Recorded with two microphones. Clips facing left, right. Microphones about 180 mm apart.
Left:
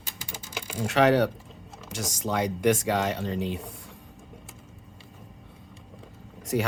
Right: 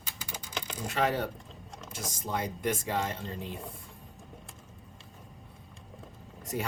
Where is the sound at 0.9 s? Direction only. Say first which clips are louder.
Left 9 dB; 80° left.